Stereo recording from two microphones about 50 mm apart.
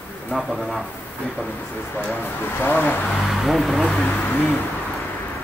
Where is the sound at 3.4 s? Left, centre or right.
Centre.